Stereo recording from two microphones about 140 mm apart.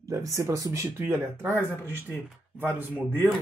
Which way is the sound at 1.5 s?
15° left (ahead or behind).